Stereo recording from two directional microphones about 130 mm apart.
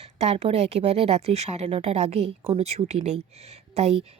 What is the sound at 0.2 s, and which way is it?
Speech, 55° right (ahead or behind).